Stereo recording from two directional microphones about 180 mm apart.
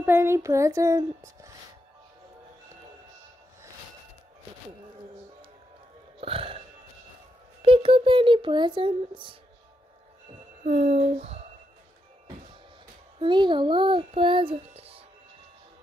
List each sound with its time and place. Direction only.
0.0 s speech: 15° right (ahead or behind)
6.2 s burping: 30° right (ahead or behind)
7.6 s a child's voice: 30° right (ahead or behind)
10.6 s speech: 40° right (ahead or behind)
13.2 s a child's voice: 25° right (ahead or behind)